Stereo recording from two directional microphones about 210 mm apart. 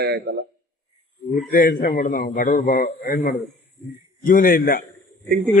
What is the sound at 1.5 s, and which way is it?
A man's voice, 40° left (ahead or behind).